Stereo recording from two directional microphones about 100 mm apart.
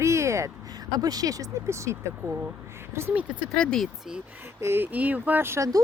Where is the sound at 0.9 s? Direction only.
40° right (ahead or behind).